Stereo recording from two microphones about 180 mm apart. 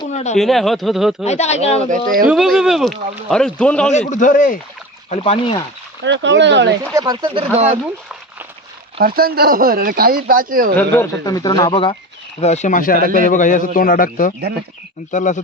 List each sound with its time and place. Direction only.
0.1 s speech: 40° left (ahead or behind)
0.3 s speech: centre (ahead or behind)
1.2 s speech: 35° left (ahead or behind)
1.9 s speech: 50° right (ahead or behind)
2.2 s speech: centre (ahead or behind)
4.1 s a man's voice: 45° left (ahead or behind)
5.0 s speech: 30° left (ahead or behind)
6.0 s speech: 85° right
6.9 s speech: 25° right (ahead or behind)
9.0 s speech: 55° right (ahead or behind)
10.8 s speech: 15° left (ahead or behind)
12.4 s a man's voice: 40° left (ahead or behind)
13.0 s speech: 50° right (ahead or behind)
13.2 s a man's voice: 45° left (ahead or behind)